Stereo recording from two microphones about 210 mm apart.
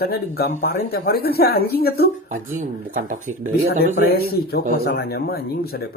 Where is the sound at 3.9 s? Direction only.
45° left (ahead or behind).